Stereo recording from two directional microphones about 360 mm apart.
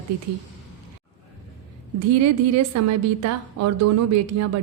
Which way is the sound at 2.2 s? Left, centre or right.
Right.